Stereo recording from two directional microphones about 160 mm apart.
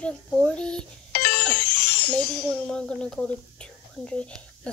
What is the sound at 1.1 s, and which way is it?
Music, 70° left (ahead or behind).